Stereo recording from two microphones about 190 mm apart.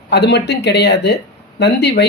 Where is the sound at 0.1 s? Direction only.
60° left (ahead or behind).